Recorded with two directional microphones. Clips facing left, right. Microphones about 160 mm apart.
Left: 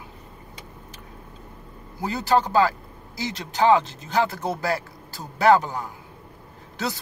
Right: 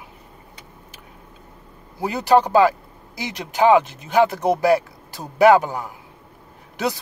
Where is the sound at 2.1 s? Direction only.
15° right (ahead or behind).